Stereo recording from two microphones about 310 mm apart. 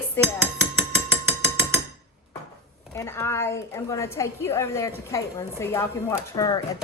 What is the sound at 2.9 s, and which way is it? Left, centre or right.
A woman's voice, centre.